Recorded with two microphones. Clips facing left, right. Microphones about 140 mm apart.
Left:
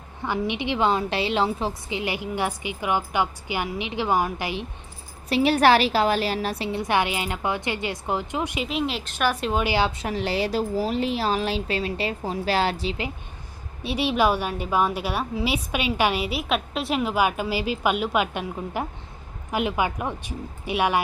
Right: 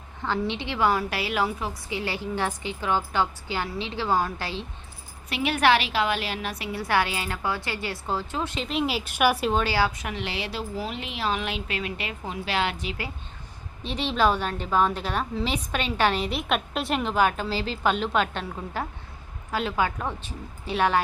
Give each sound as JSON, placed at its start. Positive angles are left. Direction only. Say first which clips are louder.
{"t": 0.2, "sound": "a woman's voice", "louder": "left 2 dB", "side_deg": 15}
{"t": 2.0, "sound": "a woman's voice", "louder": "left 1 dB", "side_deg": 15}
{"t": 5.3, "sound": "a woman's voice", "louder": "left 4 dB", "side_deg": 35}
{"t": 8.7, "sound": "a woman's voice", "louder": "even", "side_deg": -5}
{"t": 9.5, "sound": "a woman's voice", "louder": "left 1 dB", "side_deg": 15}
{"t": 13.8, "sound": "a woman's voice", "louder": "left 2 dB", "side_deg": 10}